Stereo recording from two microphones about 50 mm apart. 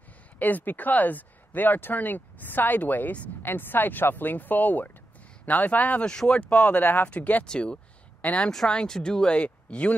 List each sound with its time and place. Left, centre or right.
0.4 s speech: left
6.0 s speech: centre
6.8 s speech: left
7.1 s speech: left
7.4 s speech: centre
8.5 s speech: centre